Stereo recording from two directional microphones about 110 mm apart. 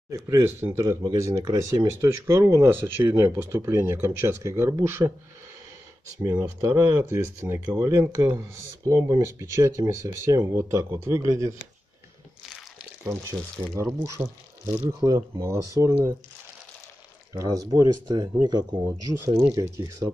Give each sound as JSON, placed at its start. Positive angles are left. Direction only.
{"t": 0.1, "sound": "speech", "side_deg": -25}
{"t": 6.2, "sound": "speech", "side_deg": -25}
{"t": 13.0, "sound": "speech", "side_deg": -25}
{"t": 17.3, "sound": "speech", "side_deg": -30}
{"t": 20.0, "sound": "speech", "side_deg": -20}